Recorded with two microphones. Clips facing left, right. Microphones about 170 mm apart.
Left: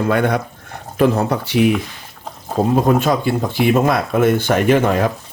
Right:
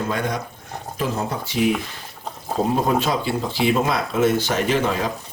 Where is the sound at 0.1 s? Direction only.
60° left (ahead or behind).